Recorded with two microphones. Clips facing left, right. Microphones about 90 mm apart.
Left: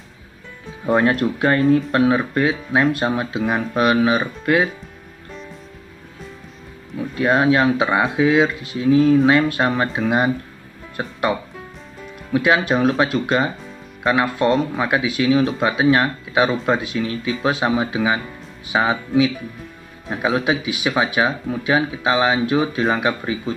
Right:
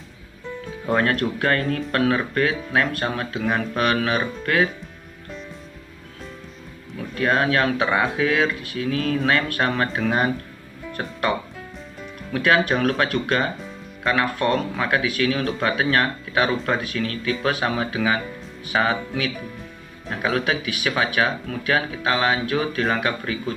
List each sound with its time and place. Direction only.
0.8 s speech: 20° left (ahead or behind)
7.0 s speech: 15° left (ahead or behind)